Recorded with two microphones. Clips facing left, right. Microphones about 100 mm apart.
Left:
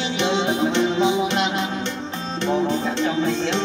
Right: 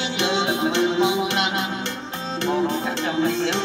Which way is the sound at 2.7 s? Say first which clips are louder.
Left 2 dB; 55° right (ahead or behind).